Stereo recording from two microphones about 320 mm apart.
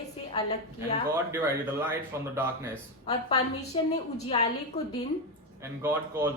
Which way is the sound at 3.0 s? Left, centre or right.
Centre.